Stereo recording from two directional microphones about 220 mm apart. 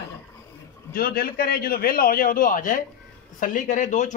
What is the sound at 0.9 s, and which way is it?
A man's voice, 40° left (ahead or behind).